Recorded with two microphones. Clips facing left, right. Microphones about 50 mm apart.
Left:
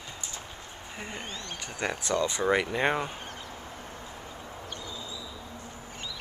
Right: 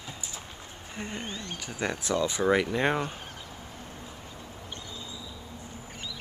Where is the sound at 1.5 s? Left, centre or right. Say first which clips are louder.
Even; centre.